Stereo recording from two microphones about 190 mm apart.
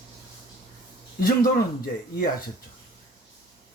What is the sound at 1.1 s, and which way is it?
Speech, 50° left (ahead or behind).